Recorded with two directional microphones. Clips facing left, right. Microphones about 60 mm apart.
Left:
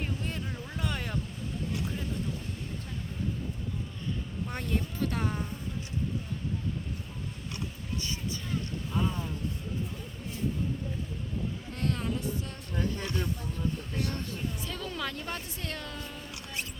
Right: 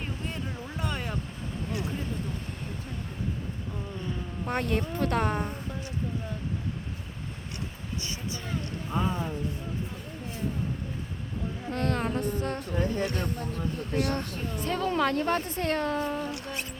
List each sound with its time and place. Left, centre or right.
0.3 s a sound: centre
4.4 s a woman's voice: right
8.9 s a sound: right
11.7 s music: right
13.0 s speech: right
13.9 s a woman's voice: right
14.7 s speech: right